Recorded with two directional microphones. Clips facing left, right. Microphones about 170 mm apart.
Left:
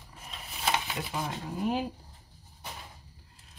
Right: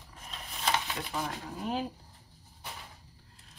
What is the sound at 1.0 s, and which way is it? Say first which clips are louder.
Speech: left 1 dB; 5° left (ahead or behind).